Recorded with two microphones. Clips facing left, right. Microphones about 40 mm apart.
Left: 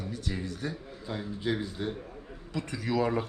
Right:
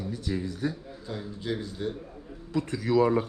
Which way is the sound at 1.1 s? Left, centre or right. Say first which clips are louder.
Left 1 dB; centre.